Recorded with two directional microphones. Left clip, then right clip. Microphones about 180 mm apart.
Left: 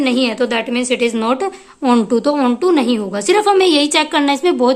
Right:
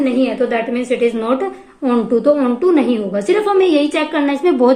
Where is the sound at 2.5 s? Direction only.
30° left (ahead or behind).